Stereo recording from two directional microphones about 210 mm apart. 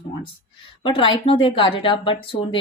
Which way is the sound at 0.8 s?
25° left (ahead or behind).